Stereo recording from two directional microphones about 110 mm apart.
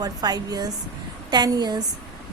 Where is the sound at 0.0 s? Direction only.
35° right (ahead or behind).